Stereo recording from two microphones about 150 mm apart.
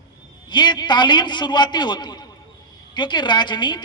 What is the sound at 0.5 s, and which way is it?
A woman's voice, 30° left (ahead or behind).